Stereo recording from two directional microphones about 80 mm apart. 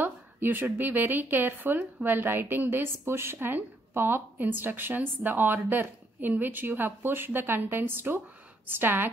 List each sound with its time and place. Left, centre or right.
0.0 s a woman's voice: right